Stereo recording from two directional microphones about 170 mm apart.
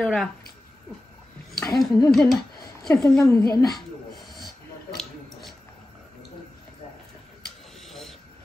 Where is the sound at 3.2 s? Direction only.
20° left (ahead or behind).